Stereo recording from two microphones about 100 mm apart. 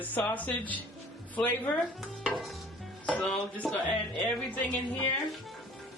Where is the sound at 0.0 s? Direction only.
15° left (ahead or behind).